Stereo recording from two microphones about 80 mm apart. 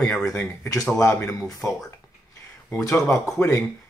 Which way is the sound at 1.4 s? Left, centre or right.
Centre.